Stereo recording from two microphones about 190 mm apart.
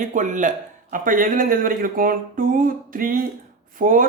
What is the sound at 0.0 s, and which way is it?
Speech, 40° right (ahead or behind).